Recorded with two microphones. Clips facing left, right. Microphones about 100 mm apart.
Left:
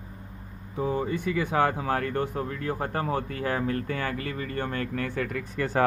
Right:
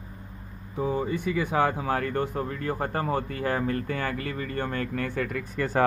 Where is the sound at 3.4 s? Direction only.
20° right (ahead or behind).